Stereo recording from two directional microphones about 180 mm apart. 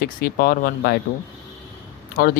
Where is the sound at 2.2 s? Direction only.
50° left (ahead or behind).